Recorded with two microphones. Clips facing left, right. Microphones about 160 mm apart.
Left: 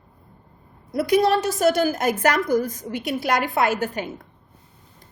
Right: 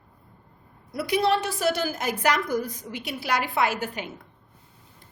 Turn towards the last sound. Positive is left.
turn(degrees=45)  # may be behind; listen again after turning